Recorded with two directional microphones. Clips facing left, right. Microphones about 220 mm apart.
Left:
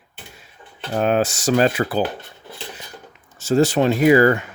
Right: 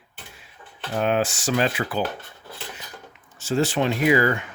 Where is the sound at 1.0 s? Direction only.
40° left (ahead or behind).